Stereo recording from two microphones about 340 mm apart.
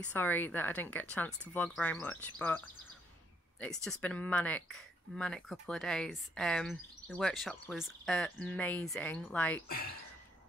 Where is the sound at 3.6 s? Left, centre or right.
Centre.